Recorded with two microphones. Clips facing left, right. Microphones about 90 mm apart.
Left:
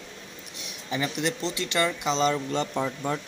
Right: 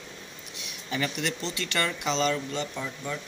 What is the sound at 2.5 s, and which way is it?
Speech, 40° left (ahead or behind).